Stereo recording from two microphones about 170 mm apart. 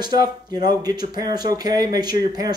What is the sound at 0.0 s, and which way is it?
Speech, 25° right (ahead or behind).